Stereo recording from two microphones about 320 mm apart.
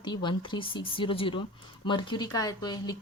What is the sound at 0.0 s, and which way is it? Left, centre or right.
A woman's voice, centre.